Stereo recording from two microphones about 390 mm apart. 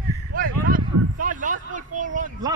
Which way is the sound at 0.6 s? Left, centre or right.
Right.